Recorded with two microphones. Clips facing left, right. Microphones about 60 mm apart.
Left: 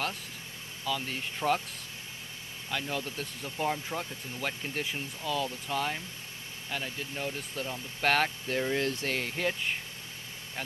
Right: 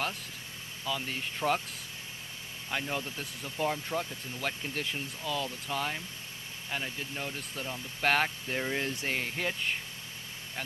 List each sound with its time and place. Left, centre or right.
0.9 s speech: centre
2.7 s speech: right
3.4 s speech: centre
6.7 s speech: centre
7.3 s speech: centre